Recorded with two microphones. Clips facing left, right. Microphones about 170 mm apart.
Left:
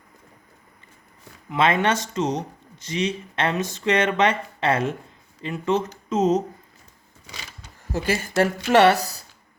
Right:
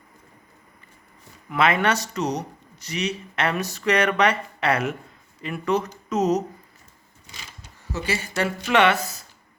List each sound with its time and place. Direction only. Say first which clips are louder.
1.5 s speech: left 1 dB; 25° left (ahead or behind)
7.9 s speech: left 5 dB; 50° left (ahead or behind)